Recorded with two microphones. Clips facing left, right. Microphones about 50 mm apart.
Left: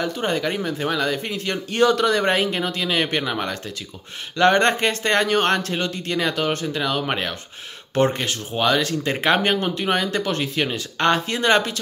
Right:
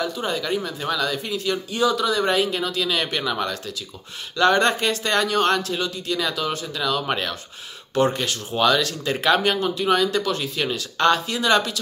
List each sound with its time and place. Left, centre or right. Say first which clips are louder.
0.0 s speech: left 3 dB; left